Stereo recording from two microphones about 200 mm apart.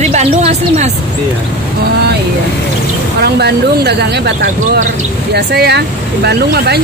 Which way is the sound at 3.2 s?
55° right (ahead or behind).